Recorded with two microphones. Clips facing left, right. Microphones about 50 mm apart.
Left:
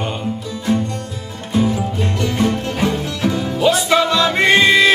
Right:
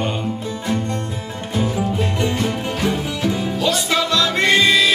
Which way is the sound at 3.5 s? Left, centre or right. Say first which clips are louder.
Left 8 dB; centre.